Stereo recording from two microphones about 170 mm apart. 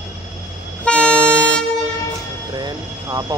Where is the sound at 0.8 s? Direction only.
5° left (ahead or behind).